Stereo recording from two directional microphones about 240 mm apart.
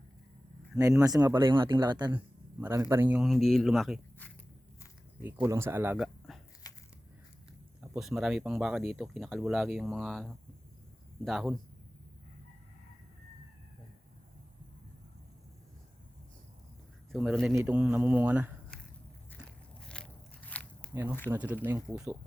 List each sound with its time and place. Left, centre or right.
0.8 s speech: centre
2.1 s a sound: centre
2.9 s speech: centre
5.2 s speech: centre
7.9 s speech: centre
17.1 s speech: centre
19.4 s biting: centre
20.9 s speech: centre